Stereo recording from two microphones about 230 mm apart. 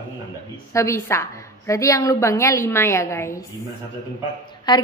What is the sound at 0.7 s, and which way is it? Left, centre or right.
A woman's voice, centre.